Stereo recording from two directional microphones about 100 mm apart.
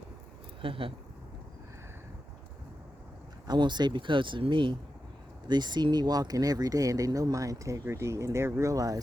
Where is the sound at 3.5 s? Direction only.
50° right (ahead or behind).